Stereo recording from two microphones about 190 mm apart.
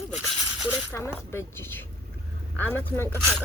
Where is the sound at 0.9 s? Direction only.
10° left (ahead or behind).